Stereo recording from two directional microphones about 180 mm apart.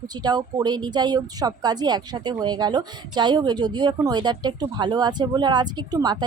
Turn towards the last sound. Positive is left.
turn(degrees=-20)  # may be behind; listen again after turning